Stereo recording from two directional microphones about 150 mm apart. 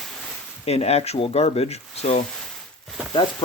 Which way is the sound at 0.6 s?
45° left (ahead or behind).